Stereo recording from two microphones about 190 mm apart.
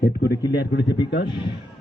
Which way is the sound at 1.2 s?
25° left (ahead or behind).